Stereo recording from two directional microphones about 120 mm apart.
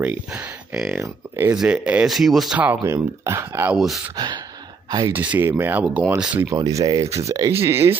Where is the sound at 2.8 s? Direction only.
25° right (ahead or behind).